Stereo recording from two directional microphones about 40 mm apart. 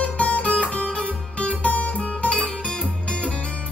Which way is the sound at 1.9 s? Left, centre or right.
Left.